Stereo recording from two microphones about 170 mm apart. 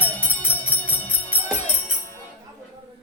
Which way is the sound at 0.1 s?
10° left (ahead or behind).